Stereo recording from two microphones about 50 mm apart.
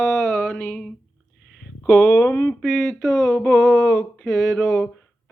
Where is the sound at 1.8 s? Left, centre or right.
Left.